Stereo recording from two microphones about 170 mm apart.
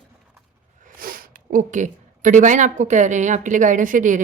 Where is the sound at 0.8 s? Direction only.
55° right (ahead or behind).